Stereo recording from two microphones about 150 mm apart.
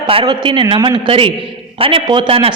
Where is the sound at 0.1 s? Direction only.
35° right (ahead or behind).